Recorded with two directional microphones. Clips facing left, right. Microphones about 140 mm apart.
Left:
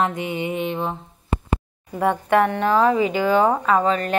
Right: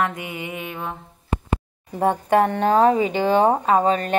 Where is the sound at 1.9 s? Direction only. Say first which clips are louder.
Even; 30° right (ahead or behind).